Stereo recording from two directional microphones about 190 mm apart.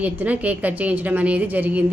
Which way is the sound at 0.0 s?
10° right (ahead or behind).